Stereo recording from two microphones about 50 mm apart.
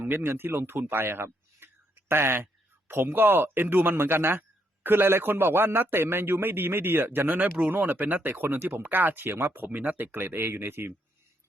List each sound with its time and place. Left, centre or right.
0.0 s a man's voice: right